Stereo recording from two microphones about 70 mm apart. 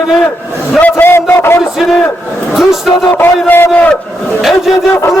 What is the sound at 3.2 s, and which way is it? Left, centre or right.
Speech, left.